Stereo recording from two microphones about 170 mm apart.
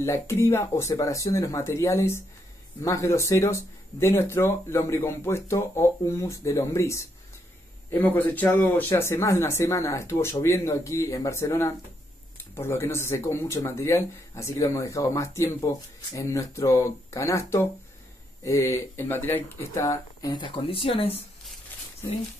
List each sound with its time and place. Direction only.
0.0 s speech: 15° left (ahead or behind); by 21.2 s 35° left (ahead or behind)